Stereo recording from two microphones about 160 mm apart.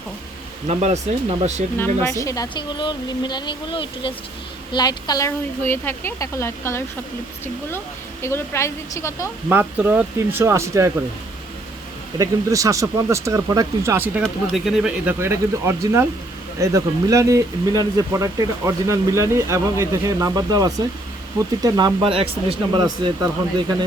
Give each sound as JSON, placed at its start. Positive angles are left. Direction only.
{"t": 0.7, "sound": "speech", "side_deg": -45}
{"t": 1.8, "sound": "a woman's voice", "side_deg": 15}
{"t": 8.2, "sound": "a woman's voice", "side_deg": 15}
{"t": 9.5, "sound": "speech", "side_deg": -10}
{"t": 12.2, "sound": "speech", "side_deg": -20}